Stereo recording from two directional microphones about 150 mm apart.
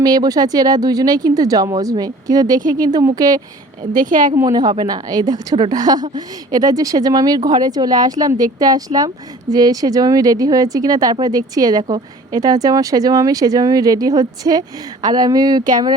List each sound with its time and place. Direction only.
0.0 s a woman's voice: 25° right (ahead or behind)
3.9 s speech: 60° right (ahead or behind)
4.4 s a woman's voice: 25° right (ahead or behind)